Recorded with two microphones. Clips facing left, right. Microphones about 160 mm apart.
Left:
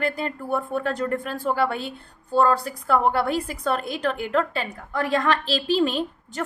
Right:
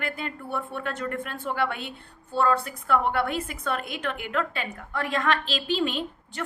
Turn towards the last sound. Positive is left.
turn(degrees=40)  # may be behind; listen again after turning